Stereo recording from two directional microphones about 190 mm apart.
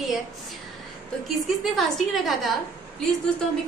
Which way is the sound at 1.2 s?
Centre (ahead or behind).